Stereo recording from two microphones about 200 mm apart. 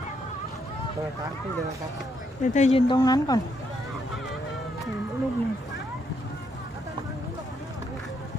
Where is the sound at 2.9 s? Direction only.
20° left (ahead or behind).